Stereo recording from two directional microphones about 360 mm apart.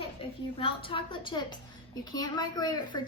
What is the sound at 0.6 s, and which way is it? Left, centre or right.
A woman's voice, centre.